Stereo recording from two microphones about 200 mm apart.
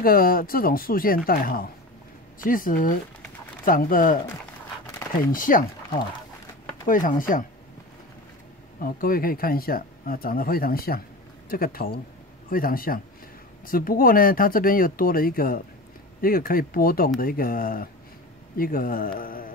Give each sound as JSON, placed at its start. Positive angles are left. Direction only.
{"t": 0.0, "sound": "speech", "side_deg": 45}
{"t": 5.3, "sound": "speech", "side_deg": 45}
{"t": 8.7, "sound": "speech", "side_deg": 45}